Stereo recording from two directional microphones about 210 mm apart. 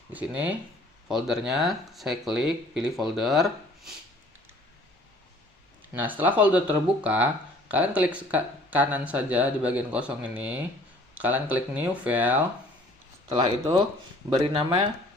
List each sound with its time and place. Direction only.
0.1 s speech: 5° right (ahead or behind)
5.9 s speech: 10° right (ahead or behind)